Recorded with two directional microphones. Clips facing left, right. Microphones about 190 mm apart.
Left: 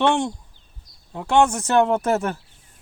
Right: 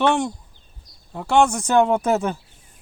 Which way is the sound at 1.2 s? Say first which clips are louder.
Even; 10° right (ahead or behind).